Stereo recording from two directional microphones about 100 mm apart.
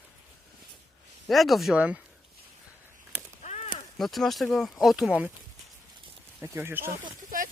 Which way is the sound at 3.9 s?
Centre (ahead or behind).